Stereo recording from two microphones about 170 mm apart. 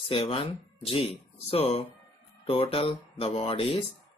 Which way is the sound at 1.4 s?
35° left (ahead or behind).